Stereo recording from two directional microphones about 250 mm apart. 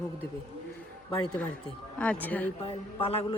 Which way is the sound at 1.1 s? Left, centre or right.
Centre.